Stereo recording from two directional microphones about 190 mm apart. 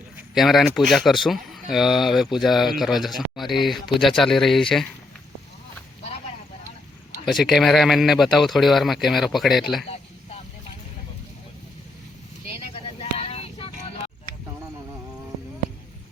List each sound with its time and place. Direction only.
0.2 s speech: centre (ahead or behind)
7.3 s speech: centre (ahead or behind)
9.9 s a sound: 30° left (ahead or behind)
12.5 s vehicle: 30° left (ahead or behind)